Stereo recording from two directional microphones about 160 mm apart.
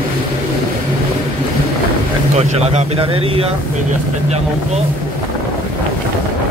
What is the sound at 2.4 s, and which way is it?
Speech, 40° right (ahead or behind).